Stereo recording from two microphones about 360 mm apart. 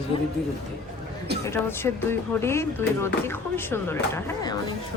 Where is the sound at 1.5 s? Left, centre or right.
Centre.